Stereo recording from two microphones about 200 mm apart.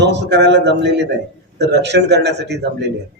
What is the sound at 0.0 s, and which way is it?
A man's voice, 60° right (ahead or behind).